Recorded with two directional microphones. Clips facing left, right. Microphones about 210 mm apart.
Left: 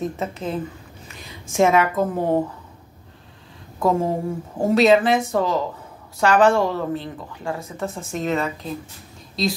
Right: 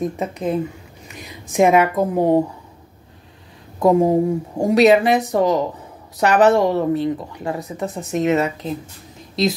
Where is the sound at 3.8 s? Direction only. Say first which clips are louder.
Right 6 dB; 15° right (ahead or behind).